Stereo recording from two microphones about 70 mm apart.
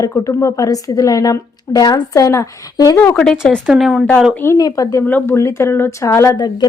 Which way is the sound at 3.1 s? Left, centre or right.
Centre.